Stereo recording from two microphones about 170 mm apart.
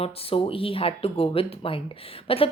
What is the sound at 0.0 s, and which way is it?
A woman's voice, 35° left (ahead or behind).